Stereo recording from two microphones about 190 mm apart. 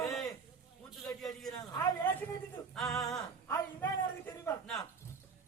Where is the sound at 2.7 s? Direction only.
Centre (ahead or behind).